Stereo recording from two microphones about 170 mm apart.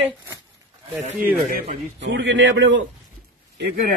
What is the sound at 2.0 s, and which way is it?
Speech, 90° right.